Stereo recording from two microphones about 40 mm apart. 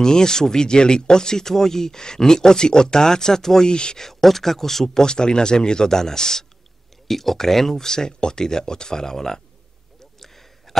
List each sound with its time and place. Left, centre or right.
0.0 s speech: centre
4.0 s speech: centre
5.0 s speech: centre
9.9 s a sound: centre